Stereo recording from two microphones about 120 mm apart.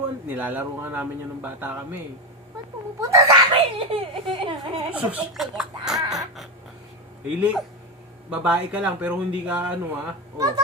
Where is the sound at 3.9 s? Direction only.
50° right (ahead or behind).